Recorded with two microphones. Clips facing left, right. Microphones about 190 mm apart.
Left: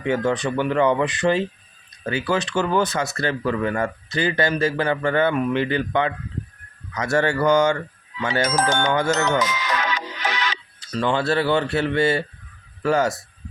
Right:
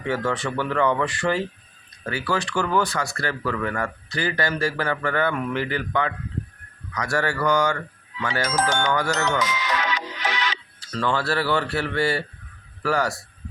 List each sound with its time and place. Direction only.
0.0 s speech: 20° left (ahead or behind)
9.4 s music: 45° left (ahead or behind)
10.8 s speech: 20° left (ahead or behind)